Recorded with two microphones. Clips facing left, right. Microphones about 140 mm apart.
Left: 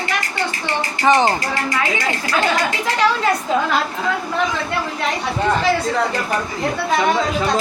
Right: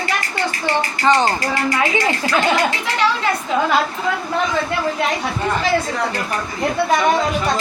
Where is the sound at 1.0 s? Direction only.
15° left (ahead or behind).